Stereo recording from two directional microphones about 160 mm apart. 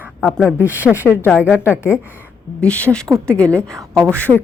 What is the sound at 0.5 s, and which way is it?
A woman's voice, 10° right (ahead or behind).